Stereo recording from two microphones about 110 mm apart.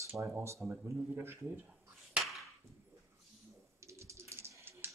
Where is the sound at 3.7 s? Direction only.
25° right (ahead or behind).